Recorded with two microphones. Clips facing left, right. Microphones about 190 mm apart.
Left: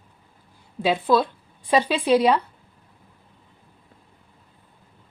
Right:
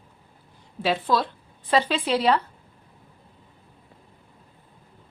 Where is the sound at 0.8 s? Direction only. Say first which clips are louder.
Left 4 dB; 15° left (ahead or behind).